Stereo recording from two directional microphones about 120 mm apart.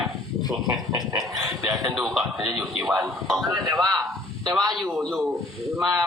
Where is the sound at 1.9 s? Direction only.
Centre (ahead or behind).